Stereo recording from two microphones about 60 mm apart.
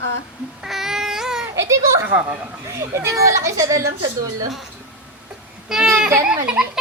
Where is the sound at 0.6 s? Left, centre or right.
Centre.